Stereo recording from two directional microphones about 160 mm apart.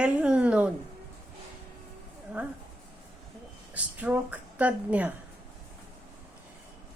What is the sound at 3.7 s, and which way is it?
Speech, 10° right (ahead or behind).